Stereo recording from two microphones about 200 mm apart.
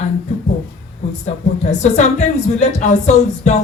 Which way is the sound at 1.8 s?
35° left (ahead or behind).